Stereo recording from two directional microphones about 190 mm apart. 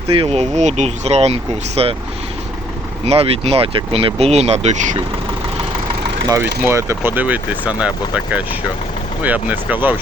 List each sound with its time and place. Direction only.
0.1 s speech: 30° right (ahead or behind)
3.1 s speech: 30° right (ahead or behind)
6.2 s speech: 10° right (ahead or behind)